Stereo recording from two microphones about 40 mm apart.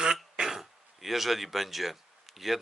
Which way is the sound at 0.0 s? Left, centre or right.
Centre.